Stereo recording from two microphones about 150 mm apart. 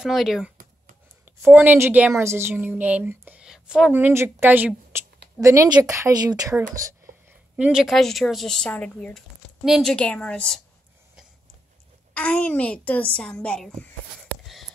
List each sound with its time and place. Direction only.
0.0 s speech: centre (ahead or behind)
1.5 s a woman's voice: 10° right (ahead or behind)
7.5 s speech: 5° right (ahead or behind)
12.1 s a woman's voice: 10° left (ahead or behind)